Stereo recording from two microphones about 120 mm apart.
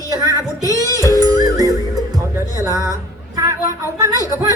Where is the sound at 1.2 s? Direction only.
30° right (ahead or behind).